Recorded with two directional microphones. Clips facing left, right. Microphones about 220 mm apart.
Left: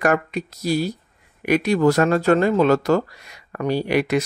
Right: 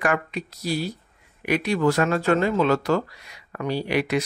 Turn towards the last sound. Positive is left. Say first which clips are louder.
# left 4 dB
turn(degrees=45)  # may be behind; listen again after turning